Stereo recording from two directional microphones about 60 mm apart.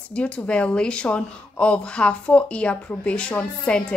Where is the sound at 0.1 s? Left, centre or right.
Centre.